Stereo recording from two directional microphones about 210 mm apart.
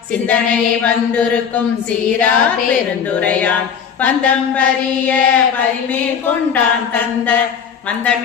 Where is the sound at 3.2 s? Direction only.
5° left (ahead or behind).